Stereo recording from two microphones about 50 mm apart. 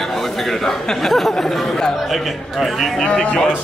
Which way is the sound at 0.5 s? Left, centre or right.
Centre.